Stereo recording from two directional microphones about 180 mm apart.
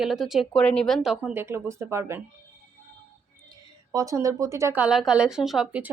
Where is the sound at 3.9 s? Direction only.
20° right (ahead or behind).